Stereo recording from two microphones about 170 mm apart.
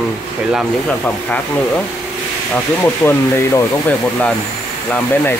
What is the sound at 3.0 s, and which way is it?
Speech, 10° left (ahead or behind).